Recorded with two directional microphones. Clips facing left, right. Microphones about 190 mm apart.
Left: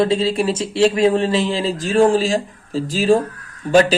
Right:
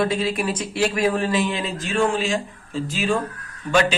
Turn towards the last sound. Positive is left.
turn(degrees=35)  # may be behind; listen again after turning